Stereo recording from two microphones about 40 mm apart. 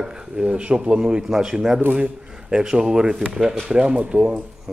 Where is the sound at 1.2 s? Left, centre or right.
Centre.